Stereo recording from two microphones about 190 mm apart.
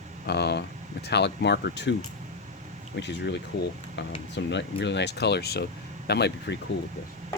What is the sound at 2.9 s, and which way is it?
Speech, 65° left (ahead or behind).